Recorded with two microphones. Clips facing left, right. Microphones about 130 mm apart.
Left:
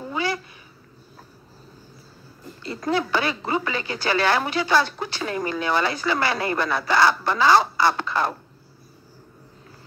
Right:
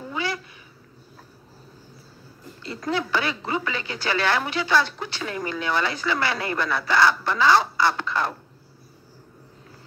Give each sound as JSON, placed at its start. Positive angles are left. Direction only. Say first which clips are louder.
{"t": 0.0, "sound": "cat", "louder": "left 3 dB", "side_deg": 40}
{"t": 2.6, "sound": "speech", "louder": "left 3 dB", "side_deg": 40}